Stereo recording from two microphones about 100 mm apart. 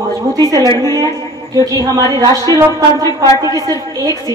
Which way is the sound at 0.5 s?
35° left (ahead or behind).